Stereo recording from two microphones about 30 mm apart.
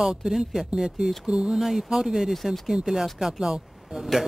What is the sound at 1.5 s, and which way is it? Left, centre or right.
Speech, centre.